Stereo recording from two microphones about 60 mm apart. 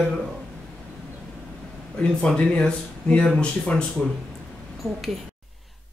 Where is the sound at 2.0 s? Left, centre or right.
Centre.